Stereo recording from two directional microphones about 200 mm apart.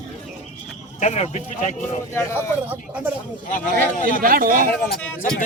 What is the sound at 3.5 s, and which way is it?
Speech, 40° left (ahead or behind).